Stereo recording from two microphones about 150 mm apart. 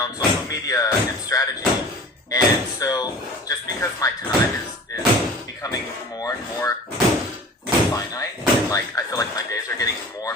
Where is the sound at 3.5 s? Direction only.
20° left (ahead or behind).